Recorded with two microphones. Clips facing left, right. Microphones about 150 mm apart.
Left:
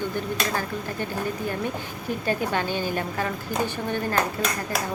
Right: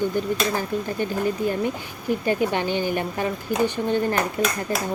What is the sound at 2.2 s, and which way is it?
A woman's voice, 15° right (ahead or behind).